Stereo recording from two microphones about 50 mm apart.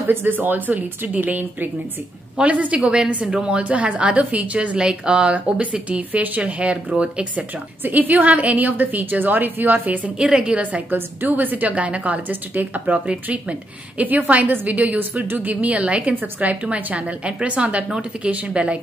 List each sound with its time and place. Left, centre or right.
0.1 s a woman's voice: right
4.7 s speech: centre
7.8 s a woman's voice: right
10.1 s speech: centre
10.9 s a woman's voice: right